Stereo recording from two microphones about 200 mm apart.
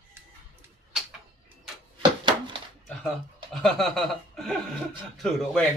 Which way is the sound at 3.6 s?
Centre (ahead or behind).